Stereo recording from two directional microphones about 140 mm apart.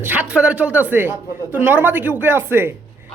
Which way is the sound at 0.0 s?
10° right (ahead or behind).